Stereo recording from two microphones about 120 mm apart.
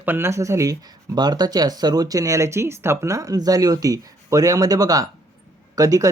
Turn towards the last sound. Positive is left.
turn(degrees=-30)  # may be behind; listen again after turning